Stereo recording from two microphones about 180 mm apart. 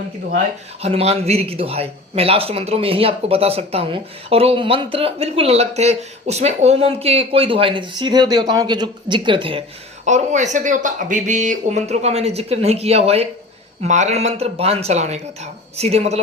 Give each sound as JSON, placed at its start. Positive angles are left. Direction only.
{"t": 0.8, "sound": "speech", "side_deg": -35}
{"t": 10.1, "sound": "speech", "side_deg": -40}